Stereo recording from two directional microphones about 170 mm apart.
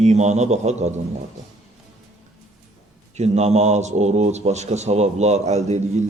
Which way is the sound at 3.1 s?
40° right (ahead or behind).